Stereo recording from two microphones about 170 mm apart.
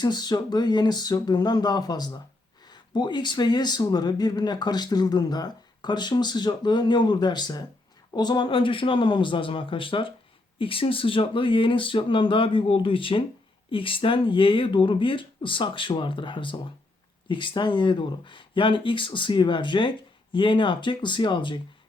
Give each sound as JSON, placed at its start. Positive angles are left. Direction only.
{"t": 0.0, "sound": "speech", "side_deg": 25}